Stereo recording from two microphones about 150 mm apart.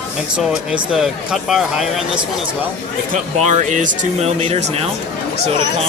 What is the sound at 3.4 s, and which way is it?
Speech, 50° right (ahead or behind).